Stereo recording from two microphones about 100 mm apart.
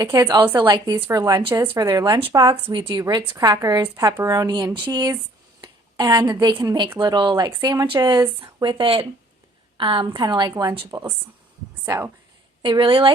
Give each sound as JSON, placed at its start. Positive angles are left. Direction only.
{"t": 0.0, "sound": "a woman's voice", "side_deg": -40}
{"t": 0.3, "sound": "a woman's voice", "side_deg": -60}
{"t": 1.1, "sound": "a woman's voice", "side_deg": -35}
{"t": 1.5, "sound": "a woman's voice", "side_deg": -55}
{"t": 1.7, "sound": "a woman's voice", "side_deg": -35}
{"t": 2.3, "sound": "a woman's voice", "side_deg": -45}
{"t": 3.1, "sound": "a woman's voice", "side_deg": -40}
{"t": 5.5, "sound": "a sound", "side_deg": -40}
{"t": 6.4, "sound": "a woman's voice", "side_deg": -55}
{"t": 8.6, "sound": "a woman's voice", "side_deg": -60}
{"t": 12.6, "sound": "speech", "side_deg": -55}